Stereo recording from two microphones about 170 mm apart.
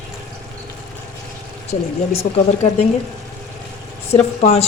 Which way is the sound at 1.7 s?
35° left (ahead or behind).